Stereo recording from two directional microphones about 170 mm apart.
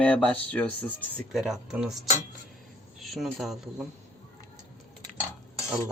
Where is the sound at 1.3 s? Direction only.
Centre (ahead or behind).